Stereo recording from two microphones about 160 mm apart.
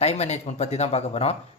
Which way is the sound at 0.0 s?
40° left (ahead or behind).